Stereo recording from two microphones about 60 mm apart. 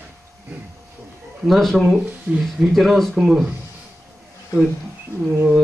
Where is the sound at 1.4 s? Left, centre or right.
Centre.